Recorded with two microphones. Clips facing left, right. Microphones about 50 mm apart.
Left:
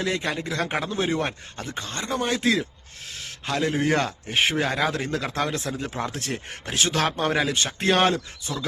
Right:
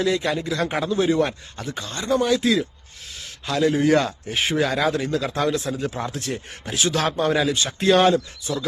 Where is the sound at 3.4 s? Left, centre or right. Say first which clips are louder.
Right 4 dB; left.